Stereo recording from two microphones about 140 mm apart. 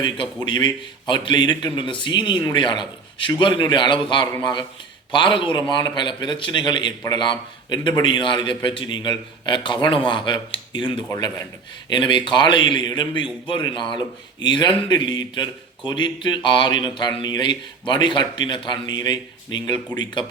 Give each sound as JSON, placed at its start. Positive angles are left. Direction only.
{"t": 0.4, "sound": "a man's voice", "side_deg": 35}
{"t": 11.1, "sound": "a man's voice", "side_deg": 25}